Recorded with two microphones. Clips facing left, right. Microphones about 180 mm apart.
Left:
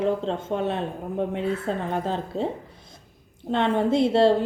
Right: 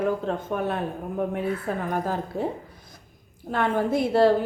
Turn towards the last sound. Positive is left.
turn(degrees=25)  # may be behind; listen again after turning